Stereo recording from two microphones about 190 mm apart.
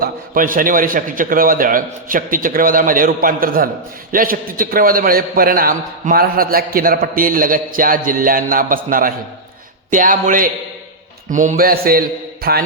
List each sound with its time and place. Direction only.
0.0 s a man's voice: 45° right (ahead or behind)